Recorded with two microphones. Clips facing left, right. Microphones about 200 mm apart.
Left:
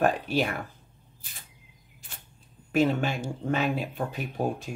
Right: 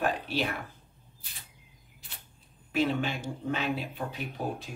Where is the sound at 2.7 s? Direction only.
45° left (ahead or behind).